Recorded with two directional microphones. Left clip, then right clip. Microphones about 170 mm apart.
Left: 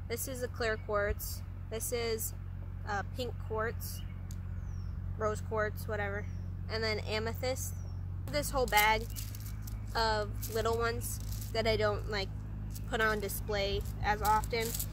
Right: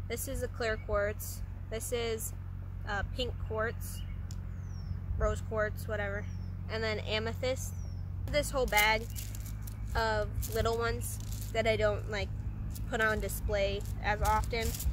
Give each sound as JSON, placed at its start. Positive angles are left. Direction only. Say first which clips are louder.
{"t": 0.1, "sound": "a woman's voice", "louder": "even", "side_deg": 10}
{"t": 5.2, "sound": "a woman's voice", "louder": "right 1 dB", "side_deg": 10}